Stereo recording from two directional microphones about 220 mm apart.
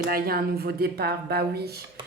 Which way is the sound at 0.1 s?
45° right (ahead or behind).